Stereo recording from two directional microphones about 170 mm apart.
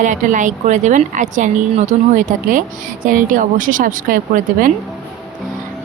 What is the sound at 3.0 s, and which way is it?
A woman's voice, 50° right (ahead or behind).